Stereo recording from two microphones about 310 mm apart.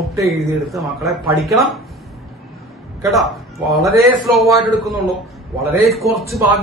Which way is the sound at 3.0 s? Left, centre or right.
Centre.